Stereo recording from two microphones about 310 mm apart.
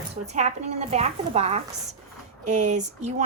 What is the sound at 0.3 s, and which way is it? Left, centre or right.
A woman's voice, right.